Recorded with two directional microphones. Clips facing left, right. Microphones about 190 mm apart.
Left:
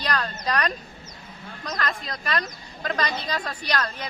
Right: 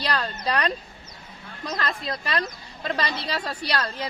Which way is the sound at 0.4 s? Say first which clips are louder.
Right 1 dB; 25° right (ahead or behind).